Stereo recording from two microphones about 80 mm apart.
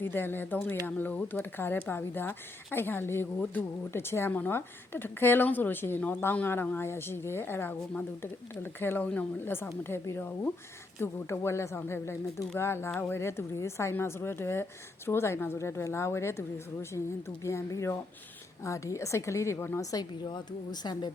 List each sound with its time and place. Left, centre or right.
0.0 s a woman's voice: left
19.8 s a woman's voice: left
20.3 s speech: left